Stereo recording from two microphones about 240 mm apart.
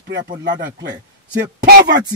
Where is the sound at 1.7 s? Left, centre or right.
Right.